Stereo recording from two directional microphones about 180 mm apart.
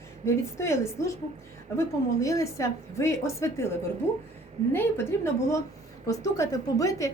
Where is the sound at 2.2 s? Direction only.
15° left (ahead or behind).